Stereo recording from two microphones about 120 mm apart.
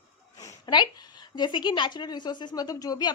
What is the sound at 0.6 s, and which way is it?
A woman's voice, 35° left (ahead or behind).